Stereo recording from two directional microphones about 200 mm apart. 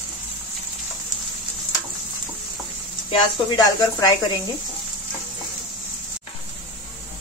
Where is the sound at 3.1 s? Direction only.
20° left (ahead or behind).